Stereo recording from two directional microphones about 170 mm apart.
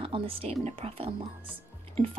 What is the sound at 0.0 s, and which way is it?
A woman's voice, 35° right (ahead or behind).